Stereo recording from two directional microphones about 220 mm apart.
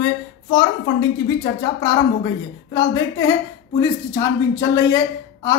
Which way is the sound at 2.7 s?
15° left (ahead or behind).